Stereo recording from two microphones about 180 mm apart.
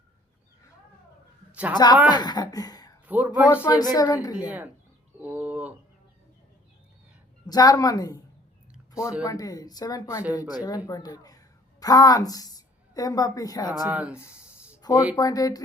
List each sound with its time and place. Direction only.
1.7 s speech: 25° left (ahead or behind)
3.1 s speech: 10° right (ahead or behind)
3.5 s speech: 15° left (ahead or behind)
4.4 s speech: 10° right (ahead or behind)
5.2 s bird: 10° right (ahead or behind)
7.4 s speech: 20° left (ahead or behind)
9.0 s speech: 5° right (ahead or behind)
9.2 s speech: 20° left (ahead or behind)
10.2 s speech: 5° right (ahead or behind)
10.8 s a woman's voice: 20° left (ahead or behind)
13.8 s speech: 5° right (ahead or behind)
14.3 s a sound: 5° right (ahead or behind)
14.8 s a sound: 20° left (ahead or behind)
15.1 s speech: 20° left (ahead or behind)